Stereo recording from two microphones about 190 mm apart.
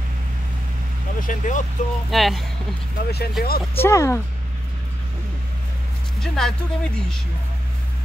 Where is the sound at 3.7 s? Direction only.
15° left (ahead or behind).